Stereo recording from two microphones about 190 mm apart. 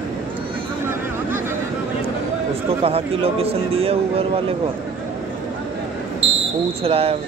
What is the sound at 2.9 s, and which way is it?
A man's voice, 30° right (ahead or behind).